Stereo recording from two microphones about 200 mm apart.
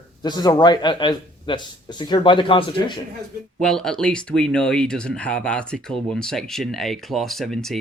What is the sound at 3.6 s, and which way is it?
Speech, 5° left (ahead or behind).